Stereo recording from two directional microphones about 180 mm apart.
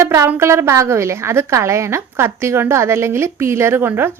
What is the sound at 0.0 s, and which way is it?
A woman's voice, 15° right (ahead or behind).